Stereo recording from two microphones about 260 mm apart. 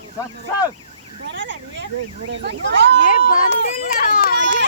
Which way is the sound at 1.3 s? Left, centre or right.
Right.